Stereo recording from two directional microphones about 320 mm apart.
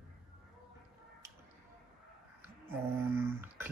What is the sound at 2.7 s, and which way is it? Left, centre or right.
Speech, centre.